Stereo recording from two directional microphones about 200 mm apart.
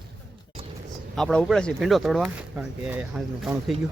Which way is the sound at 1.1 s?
5° left (ahead or behind).